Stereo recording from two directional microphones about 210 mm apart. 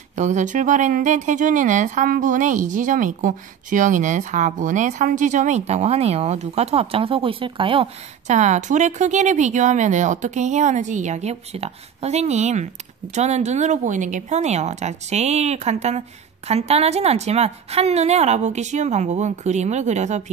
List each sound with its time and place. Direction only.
0.1 s speech: 35° right (ahead or behind)